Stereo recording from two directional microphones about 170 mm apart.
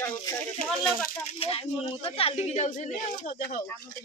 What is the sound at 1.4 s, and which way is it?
Speech, 35° left (ahead or behind).